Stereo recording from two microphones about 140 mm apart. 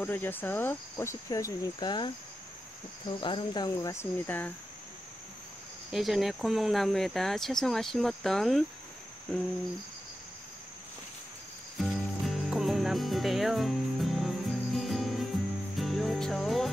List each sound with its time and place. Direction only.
0.0 s cricket: 15° left (ahead or behind); by 2.1 s 35° left (ahead or behind)
3.2 s cricket: 35° left (ahead or behind); by 4.5 s 15° left (ahead or behind)
5.9 s speech: centre (ahead or behind)
11.8 s music: centre (ahead or behind)